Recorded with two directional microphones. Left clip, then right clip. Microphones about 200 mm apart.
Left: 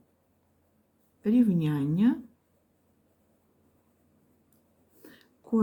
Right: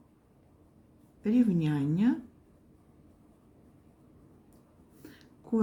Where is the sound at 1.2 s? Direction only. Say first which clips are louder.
Left 2 dB; 15° left (ahead or behind).